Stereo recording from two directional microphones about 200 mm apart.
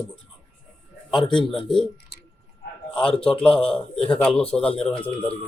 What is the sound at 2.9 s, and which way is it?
A man's voice, 5° left (ahead or behind).